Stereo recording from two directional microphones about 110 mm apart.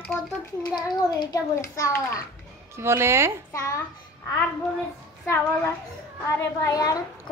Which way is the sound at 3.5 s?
30° left (ahead or behind).